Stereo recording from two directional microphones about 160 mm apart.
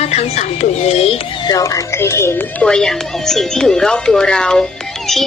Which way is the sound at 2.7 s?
5° left (ahead or behind).